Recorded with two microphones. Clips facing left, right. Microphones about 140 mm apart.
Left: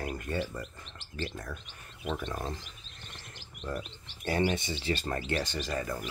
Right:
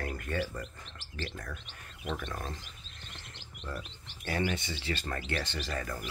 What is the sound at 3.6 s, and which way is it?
Wild animals, 20° left (ahead or behind).